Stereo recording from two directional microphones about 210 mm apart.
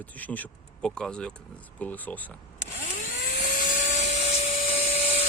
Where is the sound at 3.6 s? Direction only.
35° left (ahead or behind).